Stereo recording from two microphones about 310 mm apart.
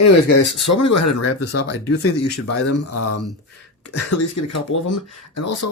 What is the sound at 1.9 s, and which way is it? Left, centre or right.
Speech, left.